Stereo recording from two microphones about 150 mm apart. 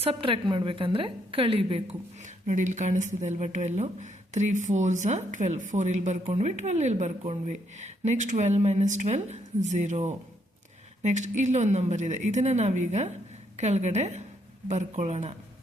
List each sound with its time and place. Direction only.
0.0 s a woman's voice: 35° right (ahead or behind)